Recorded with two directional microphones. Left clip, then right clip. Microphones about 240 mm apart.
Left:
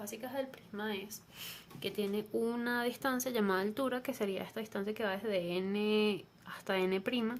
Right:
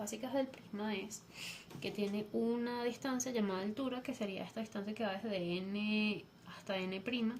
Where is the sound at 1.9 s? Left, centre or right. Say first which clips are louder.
Left 3 dB; left.